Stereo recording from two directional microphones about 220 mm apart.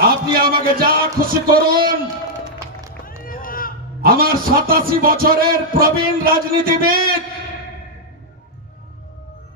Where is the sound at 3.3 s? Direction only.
40° left (ahead or behind).